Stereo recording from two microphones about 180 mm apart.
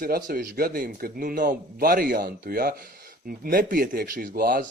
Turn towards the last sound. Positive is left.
turn(degrees=-50)  # may be behind; listen again after turning